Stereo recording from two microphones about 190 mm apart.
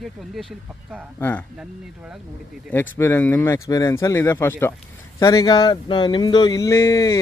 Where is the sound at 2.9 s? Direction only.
10° left (ahead or behind).